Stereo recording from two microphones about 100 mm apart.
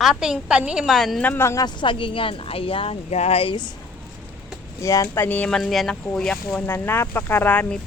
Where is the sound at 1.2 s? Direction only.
20° left (ahead or behind).